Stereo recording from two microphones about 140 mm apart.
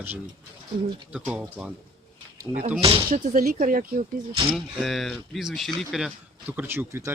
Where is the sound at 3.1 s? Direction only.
80° right.